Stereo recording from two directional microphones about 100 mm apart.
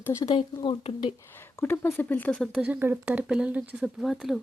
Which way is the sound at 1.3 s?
25° left (ahead or behind).